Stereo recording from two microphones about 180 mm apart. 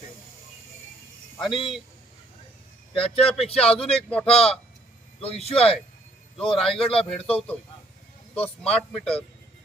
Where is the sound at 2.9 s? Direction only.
30° left (ahead or behind).